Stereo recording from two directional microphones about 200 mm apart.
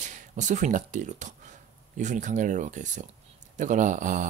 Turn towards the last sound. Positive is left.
turn(degrees=-40)  # may be behind; listen again after turning